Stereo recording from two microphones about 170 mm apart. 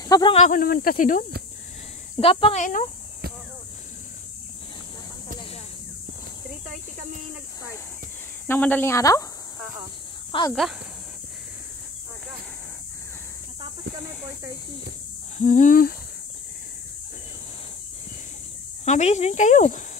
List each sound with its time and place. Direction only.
0.0 s snake: 25° left (ahead or behind)
0.4 s speech: 55° left (ahead or behind)
2.1 s speech: 35° left (ahead or behind)
2.6 s speech: 45° left (ahead or behind)
8.5 s speech: 10° left (ahead or behind)
10.5 s speech: centre (ahead or behind)
15.3 s speech: 45° left (ahead or behind)
18.9 s speech: 40° left (ahead or behind)